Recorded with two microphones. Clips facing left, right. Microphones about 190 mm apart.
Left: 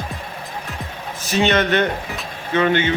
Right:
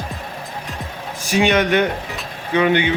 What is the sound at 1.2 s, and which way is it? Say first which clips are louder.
A man's voice: right 1 dB; 10° right (ahead or behind).